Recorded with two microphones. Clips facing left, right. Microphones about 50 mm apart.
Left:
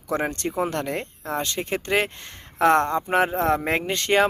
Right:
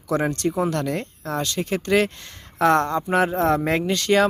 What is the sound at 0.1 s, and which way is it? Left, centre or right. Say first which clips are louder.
Speech: right 3 dB; left.